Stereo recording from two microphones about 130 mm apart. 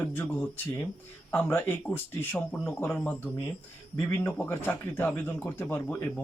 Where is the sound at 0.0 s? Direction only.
15° left (ahead or behind).